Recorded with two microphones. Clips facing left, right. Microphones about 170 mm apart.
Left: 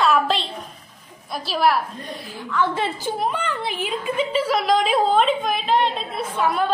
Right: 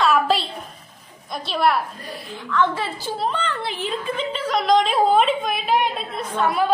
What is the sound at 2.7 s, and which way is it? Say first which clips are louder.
A woman's voice: left 3 dB; 20° left (ahead or behind).